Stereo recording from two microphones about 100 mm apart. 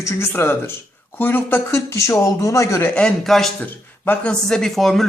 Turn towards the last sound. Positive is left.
turn(degrees=0)  # may be behind; listen again after turning